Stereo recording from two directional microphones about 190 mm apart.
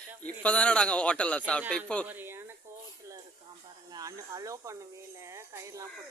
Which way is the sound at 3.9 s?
20° right (ahead or behind).